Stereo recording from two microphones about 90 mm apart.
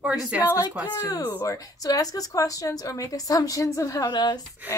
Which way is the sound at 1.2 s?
25° left (ahead or behind).